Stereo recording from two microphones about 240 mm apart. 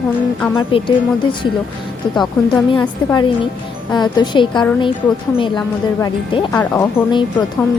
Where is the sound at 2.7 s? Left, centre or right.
Centre.